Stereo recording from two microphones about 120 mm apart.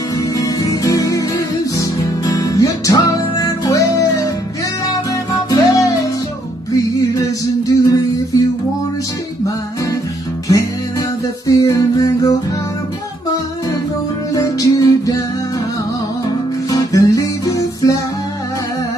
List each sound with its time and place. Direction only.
0.4 s music: 30° left (ahead or behind)
5.3 s music: 30° left (ahead or behind)
11.4 s music: 30° left (ahead or behind)
14.3 s music: 30° left (ahead or behind)
16.7 s music: 30° left (ahead or behind)